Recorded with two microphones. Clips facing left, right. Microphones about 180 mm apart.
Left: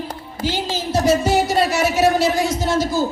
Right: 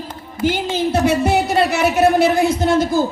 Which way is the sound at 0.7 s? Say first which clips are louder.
Left 1 dB; 60° right (ahead or behind).